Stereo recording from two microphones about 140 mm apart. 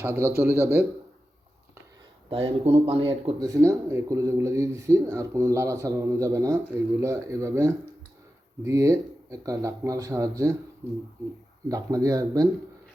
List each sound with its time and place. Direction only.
0.0 s a man's voice: 15° right (ahead or behind)
2.3 s speech: 45° right (ahead or behind)
3.4 s speech: 25° right (ahead or behind)
11.7 s speech: 25° right (ahead or behind)